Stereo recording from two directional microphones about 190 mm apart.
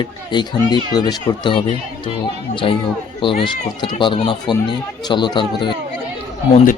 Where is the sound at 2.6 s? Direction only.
30° left (ahead or behind).